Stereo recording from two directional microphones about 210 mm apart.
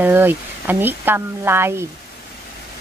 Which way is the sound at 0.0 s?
10° right (ahead or behind).